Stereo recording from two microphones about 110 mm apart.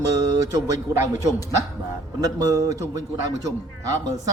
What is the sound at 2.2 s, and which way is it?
Speech, 35° right (ahead or behind).